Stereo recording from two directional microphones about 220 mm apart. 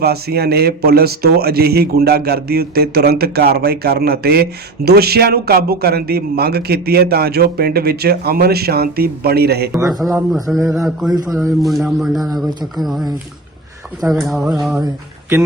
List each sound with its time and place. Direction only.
0.0 s a man's voice: 45° right (ahead or behind)
10.0 s a man's voice: 5° right (ahead or behind)
14.1 s a man's voice: centre (ahead or behind)